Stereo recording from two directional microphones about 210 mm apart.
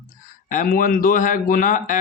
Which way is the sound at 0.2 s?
40° left (ahead or behind).